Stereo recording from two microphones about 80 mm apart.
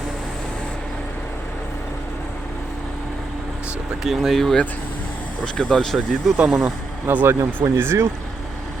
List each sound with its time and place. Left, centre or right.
4.0 s speech: centre
7.1 s speech: right
7.3 s speech: right